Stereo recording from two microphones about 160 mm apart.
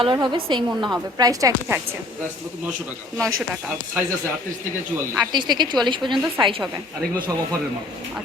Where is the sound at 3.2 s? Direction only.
5° right (ahead or behind).